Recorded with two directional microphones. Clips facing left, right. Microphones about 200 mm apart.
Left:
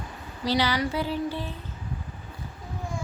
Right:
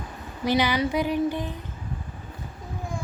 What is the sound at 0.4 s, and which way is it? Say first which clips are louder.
Speech: right 2 dB; 15° right (ahead or behind).